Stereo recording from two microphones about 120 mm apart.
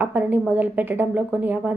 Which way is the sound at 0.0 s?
15° right (ahead or behind).